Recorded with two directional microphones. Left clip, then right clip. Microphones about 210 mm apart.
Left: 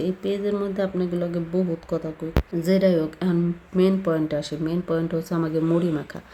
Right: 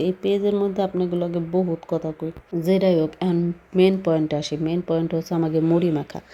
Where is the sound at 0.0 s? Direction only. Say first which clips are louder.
Right 4 dB; 15° right (ahead or behind).